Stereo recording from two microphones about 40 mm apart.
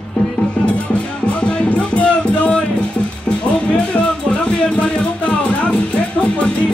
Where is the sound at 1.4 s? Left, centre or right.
Left.